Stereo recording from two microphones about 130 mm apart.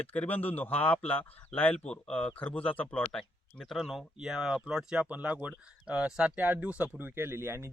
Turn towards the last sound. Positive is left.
turn(degrees=-20)  # may be behind; listen again after turning